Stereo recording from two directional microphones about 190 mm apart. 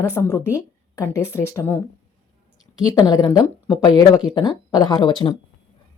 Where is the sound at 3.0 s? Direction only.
20° left (ahead or behind).